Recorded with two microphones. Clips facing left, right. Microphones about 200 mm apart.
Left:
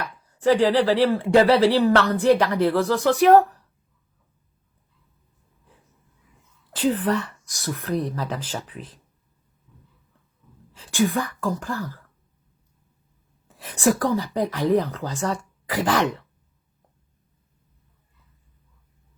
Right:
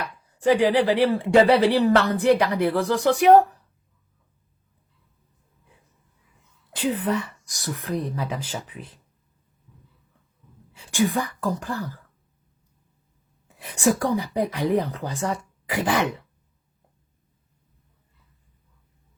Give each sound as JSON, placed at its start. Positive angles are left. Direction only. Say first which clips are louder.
{"t": 0.0, "sound": "speech", "louder": "left 1 dB", "side_deg": -15}
{"t": 6.9, "sound": "speech", "louder": "left 1 dB", "side_deg": -10}
{"t": 10.9, "sound": "speech", "louder": "left 1 dB", "side_deg": -15}
{"t": 13.7, "sound": "speech", "louder": "left 1 dB", "side_deg": -15}